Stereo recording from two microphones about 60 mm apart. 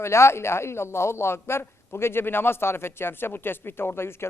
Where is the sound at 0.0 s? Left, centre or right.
Left.